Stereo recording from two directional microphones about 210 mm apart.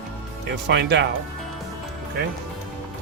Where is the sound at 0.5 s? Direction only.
55° right (ahead or behind).